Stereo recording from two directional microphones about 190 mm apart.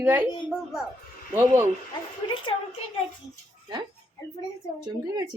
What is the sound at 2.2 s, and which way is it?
Speech, 25° left (ahead or behind).